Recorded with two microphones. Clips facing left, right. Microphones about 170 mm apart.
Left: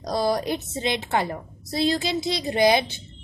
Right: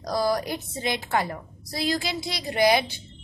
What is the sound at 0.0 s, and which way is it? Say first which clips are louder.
A woman's voice: left 1 dB; 25° left (ahead or behind).